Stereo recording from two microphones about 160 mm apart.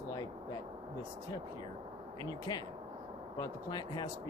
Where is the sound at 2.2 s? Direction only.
25° left (ahead or behind).